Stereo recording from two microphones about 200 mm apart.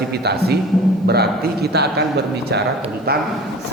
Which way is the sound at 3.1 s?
50° right (ahead or behind).